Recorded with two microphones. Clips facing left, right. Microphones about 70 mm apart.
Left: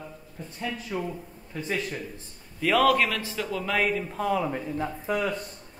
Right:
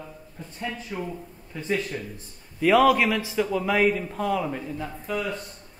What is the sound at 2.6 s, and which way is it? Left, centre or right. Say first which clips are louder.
A man's voice: right 3 dB; centre.